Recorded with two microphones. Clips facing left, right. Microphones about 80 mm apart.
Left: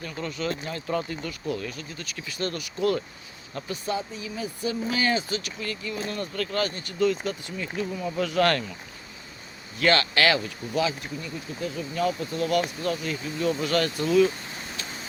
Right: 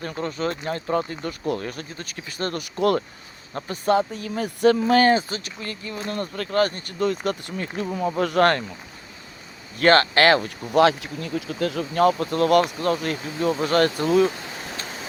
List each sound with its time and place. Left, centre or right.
0.0 s speech: right
9.7 s speech: right
13.5 s speech: right